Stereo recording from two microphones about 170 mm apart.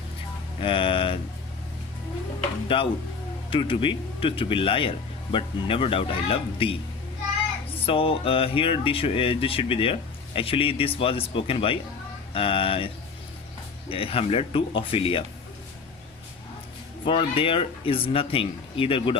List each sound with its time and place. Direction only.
0.6 s speech: 30° left (ahead or behind)
2.7 s speech: 30° left (ahead or behind)
7.9 s speech: 30° left (ahead or behind)
13.9 s speech: 35° left (ahead or behind)
17.1 s speech: 30° left (ahead or behind)